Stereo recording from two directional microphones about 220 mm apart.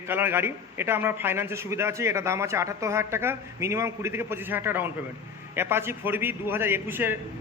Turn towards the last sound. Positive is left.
turn(degrees=-10)  # may be behind; listen again after turning